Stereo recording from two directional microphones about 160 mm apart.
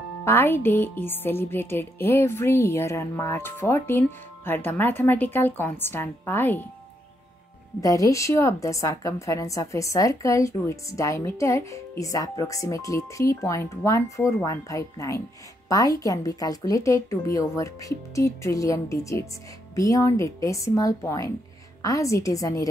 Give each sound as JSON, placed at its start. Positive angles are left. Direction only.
{"t": 0.2, "sound": "speech", "side_deg": 15}
{"t": 7.8, "sound": "a woman's voice", "side_deg": 20}